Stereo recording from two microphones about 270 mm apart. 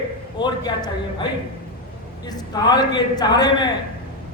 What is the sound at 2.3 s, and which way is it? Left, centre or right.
A man's voice, centre.